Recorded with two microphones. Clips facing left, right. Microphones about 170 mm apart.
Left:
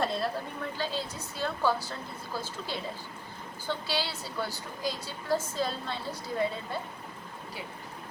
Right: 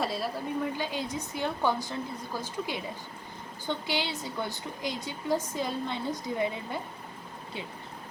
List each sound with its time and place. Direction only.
0.0 s a woman's voice: 5° right (ahead or behind)